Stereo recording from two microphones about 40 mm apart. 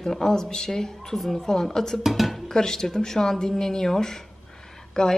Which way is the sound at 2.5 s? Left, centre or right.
Centre.